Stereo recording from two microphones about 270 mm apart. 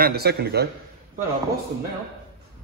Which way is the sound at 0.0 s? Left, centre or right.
Right.